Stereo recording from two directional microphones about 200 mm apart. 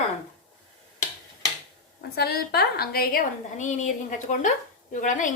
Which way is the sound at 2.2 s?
55° left (ahead or behind).